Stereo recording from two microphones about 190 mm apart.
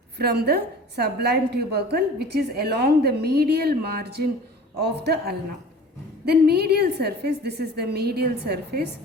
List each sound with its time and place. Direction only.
0.2 s a woman's voice: 55° right (ahead or behind)